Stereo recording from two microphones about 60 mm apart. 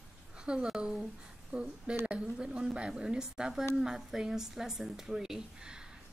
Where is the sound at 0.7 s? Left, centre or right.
Centre.